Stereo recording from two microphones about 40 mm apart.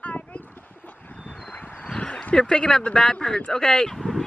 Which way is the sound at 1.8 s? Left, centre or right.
Left.